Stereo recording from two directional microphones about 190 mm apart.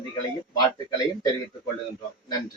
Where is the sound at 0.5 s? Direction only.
20° left (ahead or behind).